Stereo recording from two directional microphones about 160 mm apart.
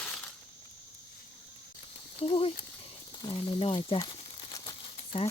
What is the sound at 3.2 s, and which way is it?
Speech, 35° left (ahead or behind).